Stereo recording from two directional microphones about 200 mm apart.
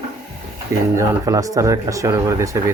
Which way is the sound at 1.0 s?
15° right (ahead or behind).